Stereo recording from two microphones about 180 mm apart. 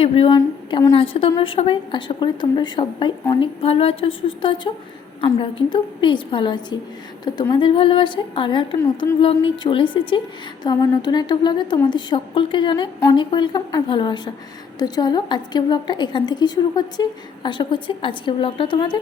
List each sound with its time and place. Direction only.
0.0 s a woman's voice: 30° left (ahead or behind)
0.3 s a woman's voice: 20° left (ahead or behind)